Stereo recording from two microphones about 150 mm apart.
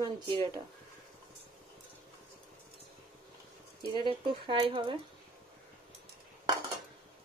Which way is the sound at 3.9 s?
35° right (ahead or behind).